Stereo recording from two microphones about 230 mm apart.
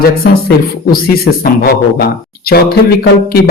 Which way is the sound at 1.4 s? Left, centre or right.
Left.